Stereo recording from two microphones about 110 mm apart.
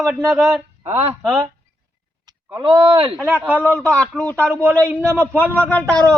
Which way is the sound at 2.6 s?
50° right (ahead or behind).